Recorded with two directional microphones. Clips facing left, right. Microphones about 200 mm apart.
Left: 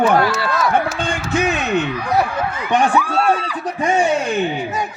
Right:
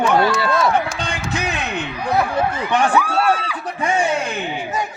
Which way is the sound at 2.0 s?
30° right (ahead or behind).